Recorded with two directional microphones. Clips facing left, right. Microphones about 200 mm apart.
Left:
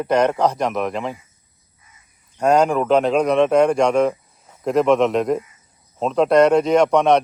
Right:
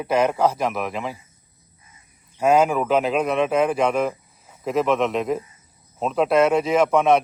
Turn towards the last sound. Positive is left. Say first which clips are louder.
# left 2 dB
turn(degrees=-5)  # may be behind; listen again after turning